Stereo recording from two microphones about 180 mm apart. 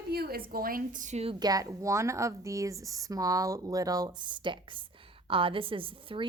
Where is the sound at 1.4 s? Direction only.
20° right (ahead or behind).